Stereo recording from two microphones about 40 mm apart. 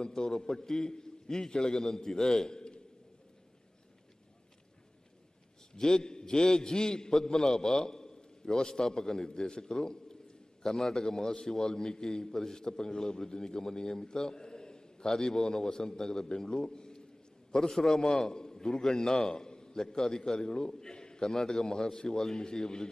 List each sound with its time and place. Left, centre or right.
0.0 s a man's voice: centre
5.7 s a man's voice: centre